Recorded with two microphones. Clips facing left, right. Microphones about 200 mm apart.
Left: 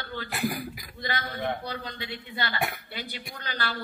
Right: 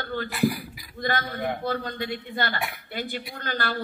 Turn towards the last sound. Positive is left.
turn(degrees=-45)  # may be behind; listen again after turning